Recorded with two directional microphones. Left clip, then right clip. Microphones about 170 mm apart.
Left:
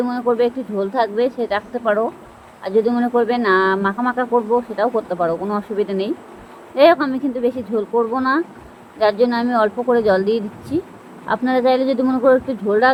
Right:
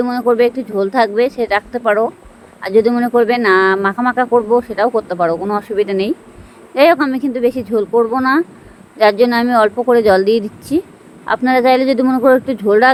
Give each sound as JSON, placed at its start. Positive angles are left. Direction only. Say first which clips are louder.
{"t": 0.0, "sound": "speech", "louder": "right 5 dB", "side_deg": -60}